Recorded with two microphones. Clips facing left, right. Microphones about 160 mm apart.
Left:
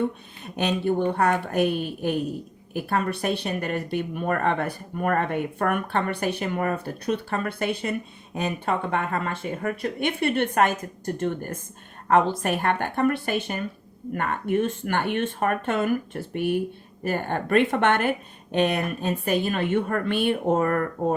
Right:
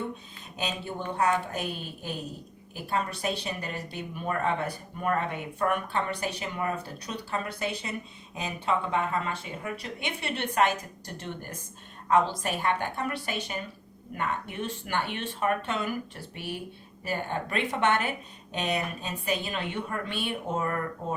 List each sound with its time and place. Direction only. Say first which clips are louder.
0.4 s speech: left 10 dB; 65° left (ahead or behind)